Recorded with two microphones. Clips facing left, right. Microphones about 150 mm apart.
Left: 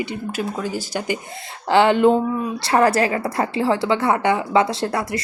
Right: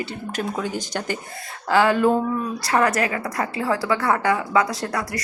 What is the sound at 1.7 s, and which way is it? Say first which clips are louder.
A woman's voice: left 3 dB; 25° left (ahead or behind).